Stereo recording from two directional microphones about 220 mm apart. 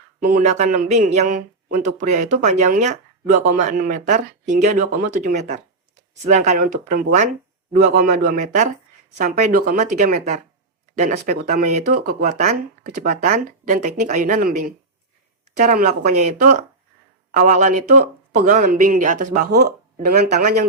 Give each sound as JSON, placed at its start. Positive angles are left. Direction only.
{"t": 0.2, "sound": "speech", "side_deg": -35}